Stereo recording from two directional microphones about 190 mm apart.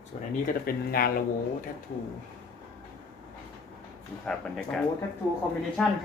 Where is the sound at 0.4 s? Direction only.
50° left (ahead or behind).